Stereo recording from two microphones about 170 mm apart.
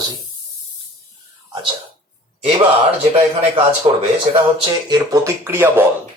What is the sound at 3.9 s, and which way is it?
Speech, 30° right (ahead or behind).